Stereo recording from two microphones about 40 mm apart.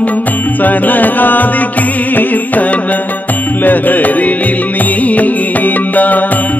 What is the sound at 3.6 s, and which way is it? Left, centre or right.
Music, left.